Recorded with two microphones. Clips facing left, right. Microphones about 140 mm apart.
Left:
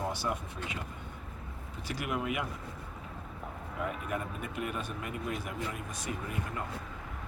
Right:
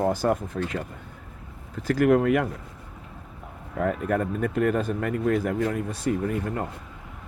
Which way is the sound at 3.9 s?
55° right (ahead or behind).